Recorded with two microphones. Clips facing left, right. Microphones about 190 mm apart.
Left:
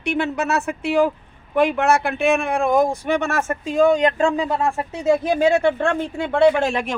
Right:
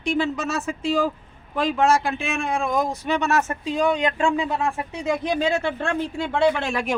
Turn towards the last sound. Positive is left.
turn(degrees=55)  # may be behind; listen again after turning